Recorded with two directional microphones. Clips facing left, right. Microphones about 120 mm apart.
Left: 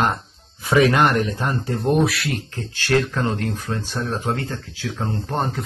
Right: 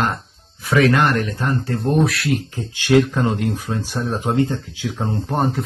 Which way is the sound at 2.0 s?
Centre (ahead or behind).